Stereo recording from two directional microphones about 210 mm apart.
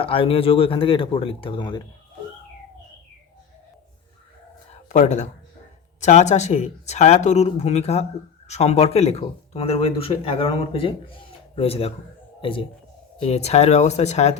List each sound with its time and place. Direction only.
0.0 s speech: 25° left (ahead or behind)
4.7 s a sound: 35° left (ahead or behind)
6.0 s a man's voice: 35° left (ahead or behind)